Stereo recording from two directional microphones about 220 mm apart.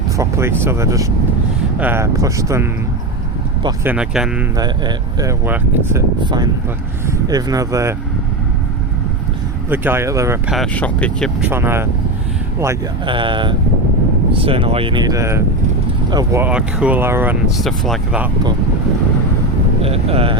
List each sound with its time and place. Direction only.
0.2 s speech: 10° right (ahead or behind)
3.9 s speech: 5° right (ahead or behind)
4.5 s speech: 15° right (ahead or behind)
9.6 s speech: 10° right (ahead or behind)
10.5 s speech: 5° left (ahead or behind)
11.4 s speech: 10° right (ahead or behind)
19.8 s speech: 25° right (ahead or behind)